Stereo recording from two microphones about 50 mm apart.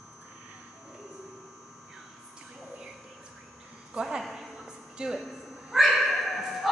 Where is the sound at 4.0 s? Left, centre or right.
Centre.